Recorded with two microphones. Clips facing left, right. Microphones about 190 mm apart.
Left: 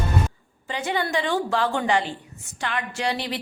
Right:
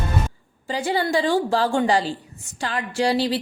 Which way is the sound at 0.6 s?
35° right (ahead or behind).